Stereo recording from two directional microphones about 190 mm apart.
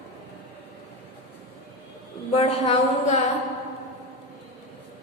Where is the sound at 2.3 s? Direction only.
30° left (ahead or behind).